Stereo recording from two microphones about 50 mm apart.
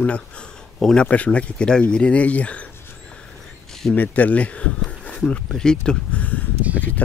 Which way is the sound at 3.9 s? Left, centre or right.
Left.